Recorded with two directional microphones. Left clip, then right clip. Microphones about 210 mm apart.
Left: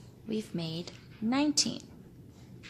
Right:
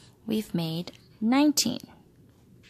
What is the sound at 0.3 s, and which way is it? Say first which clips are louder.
A woman's voice: right 5 dB; 40° right (ahead or behind).